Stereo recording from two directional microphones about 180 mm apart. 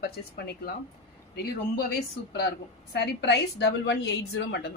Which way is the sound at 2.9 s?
70° left (ahead or behind).